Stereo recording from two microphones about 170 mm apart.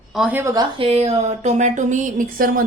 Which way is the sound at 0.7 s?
35° right (ahead or behind).